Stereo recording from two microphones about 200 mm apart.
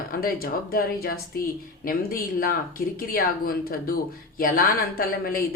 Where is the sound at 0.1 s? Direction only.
45° left (ahead or behind).